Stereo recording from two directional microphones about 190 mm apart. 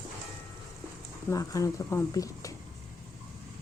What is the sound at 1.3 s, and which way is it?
Speech, 15° left (ahead or behind).